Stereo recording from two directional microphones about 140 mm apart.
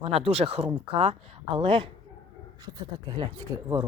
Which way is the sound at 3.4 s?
25° right (ahead or behind).